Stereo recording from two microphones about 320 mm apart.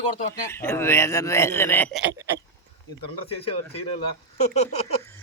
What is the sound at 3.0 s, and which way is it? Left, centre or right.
Speech, centre.